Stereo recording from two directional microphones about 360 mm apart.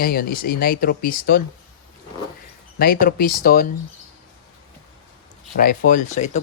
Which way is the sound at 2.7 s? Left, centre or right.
Left.